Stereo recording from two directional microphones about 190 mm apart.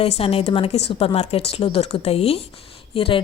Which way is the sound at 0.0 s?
30° left (ahead or behind).